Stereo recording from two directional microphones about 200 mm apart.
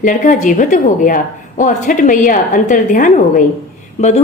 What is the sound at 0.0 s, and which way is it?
A woman's voice, 40° left (ahead or behind).